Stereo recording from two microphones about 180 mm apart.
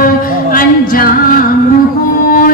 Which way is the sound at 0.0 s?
50° left (ahead or behind).